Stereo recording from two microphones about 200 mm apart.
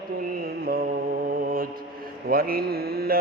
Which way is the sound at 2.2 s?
50° right (ahead or behind).